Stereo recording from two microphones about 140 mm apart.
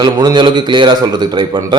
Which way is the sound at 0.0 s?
30° right (ahead or behind).